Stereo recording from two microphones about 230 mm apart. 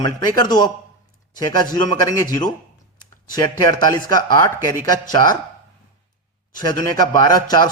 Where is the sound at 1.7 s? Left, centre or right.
Centre.